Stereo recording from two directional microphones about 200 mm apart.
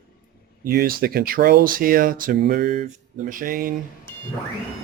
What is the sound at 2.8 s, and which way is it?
Speech, 40° right (ahead or behind).